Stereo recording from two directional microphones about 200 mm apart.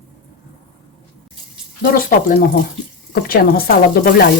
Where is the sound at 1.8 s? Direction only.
45° left (ahead or behind).